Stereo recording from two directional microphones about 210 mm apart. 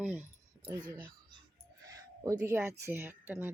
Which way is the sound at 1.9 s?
15° right (ahead or behind).